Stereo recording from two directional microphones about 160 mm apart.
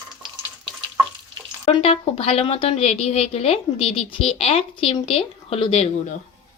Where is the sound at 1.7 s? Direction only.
35° left (ahead or behind).